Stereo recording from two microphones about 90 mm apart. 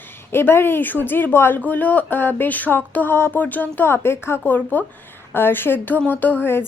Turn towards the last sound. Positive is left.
turn(degrees=25)  # may be behind; listen again after turning